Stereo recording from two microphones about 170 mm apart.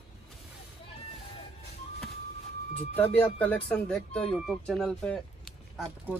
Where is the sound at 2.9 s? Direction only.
10° left (ahead or behind).